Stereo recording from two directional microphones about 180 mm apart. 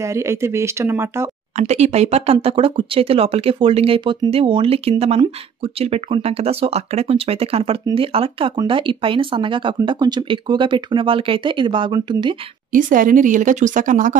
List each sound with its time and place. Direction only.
0.1 s speech: 15° right (ahead or behind)
1.6 s speech: 40° right (ahead or behind)
12.7 s speech: 50° right (ahead or behind)